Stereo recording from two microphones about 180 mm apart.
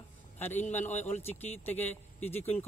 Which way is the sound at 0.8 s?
40° left (ahead or behind).